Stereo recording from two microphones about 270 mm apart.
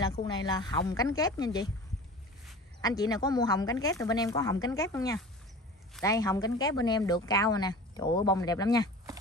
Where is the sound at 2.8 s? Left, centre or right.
Centre.